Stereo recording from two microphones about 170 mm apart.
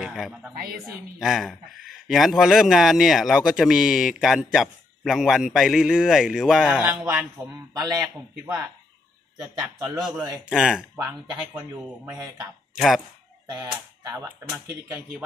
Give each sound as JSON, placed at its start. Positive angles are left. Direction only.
{"t": 0.0, "sound": "speech", "side_deg": -5}
{"t": 0.6, "sound": "a woman's voice", "side_deg": -60}
{"t": 1.2, "sound": "speech", "side_deg": 0}
{"t": 7.7, "sound": "speech", "side_deg": -20}
{"t": 10.0, "sound": "speech", "side_deg": -5}
{"t": 11.1, "sound": "speech", "side_deg": -20}
{"t": 12.7, "sound": "speech", "side_deg": 0}
{"t": 13.5, "sound": "speech", "side_deg": -20}